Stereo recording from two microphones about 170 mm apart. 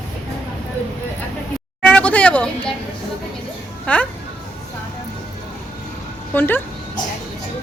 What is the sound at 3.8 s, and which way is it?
Speech, 10° left (ahead or behind).